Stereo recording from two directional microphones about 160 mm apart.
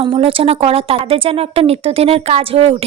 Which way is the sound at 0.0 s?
35° right (ahead or behind).